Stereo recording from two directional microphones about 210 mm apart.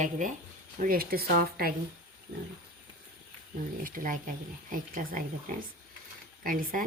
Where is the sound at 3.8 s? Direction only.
40° right (ahead or behind).